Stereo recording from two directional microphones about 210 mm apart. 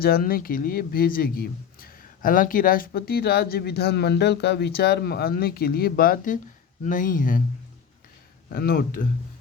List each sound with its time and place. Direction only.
0.0 s speech: 45° left (ahead or behind)
8.4 s speech: 45° left (ahead or behind)